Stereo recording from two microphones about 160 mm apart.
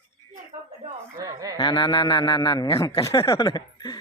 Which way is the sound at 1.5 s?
30° left (ahead or behind).